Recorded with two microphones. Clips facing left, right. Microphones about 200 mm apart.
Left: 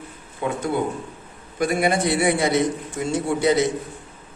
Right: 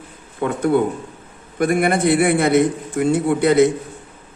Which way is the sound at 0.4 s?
55° right (ahead or behind).